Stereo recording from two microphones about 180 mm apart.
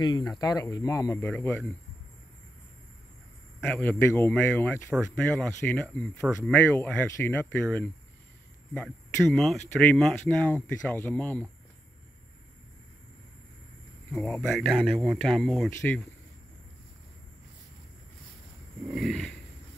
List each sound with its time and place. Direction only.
0.0 s speech: 25° left (ahead or behind)
3.6 s speech: 5° left (ahead or behind)
14.1 s speech: 5° left (ahead or behind)
18.9 s speech: centre (ahead or behind)